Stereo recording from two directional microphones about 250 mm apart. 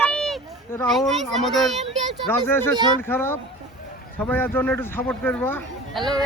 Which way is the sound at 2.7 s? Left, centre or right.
Centre.